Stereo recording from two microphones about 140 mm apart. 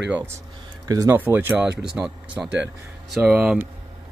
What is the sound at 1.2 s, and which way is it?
Speech, 15° right (ahead or behind).